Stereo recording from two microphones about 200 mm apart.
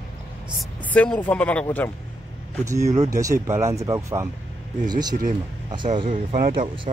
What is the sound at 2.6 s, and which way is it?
Speech, 15° right (ahead or behind).